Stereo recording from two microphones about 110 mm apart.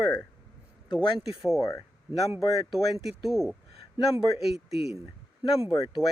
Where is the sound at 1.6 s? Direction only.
30° left (ahead or behind).